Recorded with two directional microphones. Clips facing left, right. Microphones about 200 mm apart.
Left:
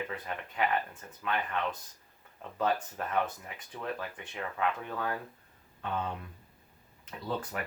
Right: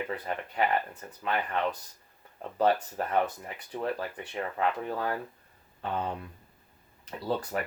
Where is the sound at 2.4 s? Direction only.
35° right (ahead or behind).